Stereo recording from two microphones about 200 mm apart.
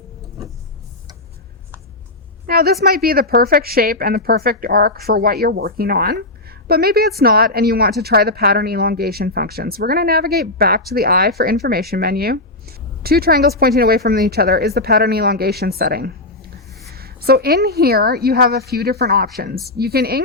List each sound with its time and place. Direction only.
2.5 s a woman's voice: 50° right (ahead or behind)